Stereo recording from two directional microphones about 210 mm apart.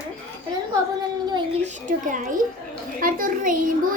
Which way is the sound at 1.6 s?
40° right (ahead or behind).